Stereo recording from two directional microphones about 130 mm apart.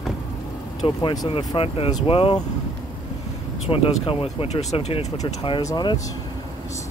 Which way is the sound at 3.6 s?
45° left (ahead or behind).